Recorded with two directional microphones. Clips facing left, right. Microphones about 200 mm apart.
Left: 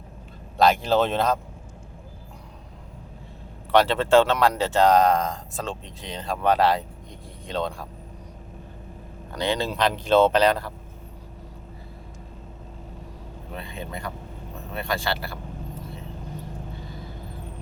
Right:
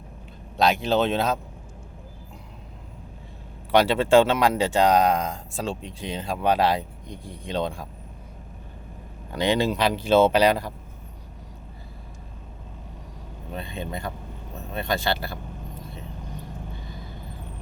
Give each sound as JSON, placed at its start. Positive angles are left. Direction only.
{"t": 0.5, "sound": "speech", "side_deg": 0}
{"t": 3.7, "sound": "speech", "side_deg": -10}
{"t": 9.3, "sound": "speech", "side_deg": -15}
{"t": 13.6, "sound": "speech", "side_deg": -25}